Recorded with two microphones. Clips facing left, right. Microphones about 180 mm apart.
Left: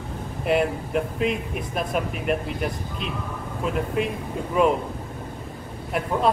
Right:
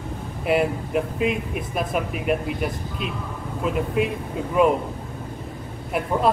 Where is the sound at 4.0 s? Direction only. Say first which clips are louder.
Right 2 dB; centre (ahead or behind).